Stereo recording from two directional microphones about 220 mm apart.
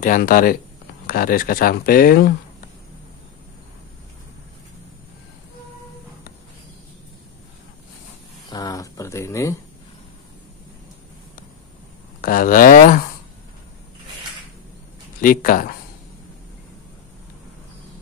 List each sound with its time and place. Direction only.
0.0 s speech: 40° left (ahead or behind)
8.5 s a sound: 15° left (ahead or behind)
12.2 s speech: 40° left (ahead or behind)
15.1 s speech: 40° left (ahead or behind)